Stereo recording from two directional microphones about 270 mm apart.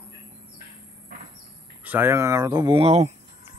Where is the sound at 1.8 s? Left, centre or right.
Centre; by 3.1 s right.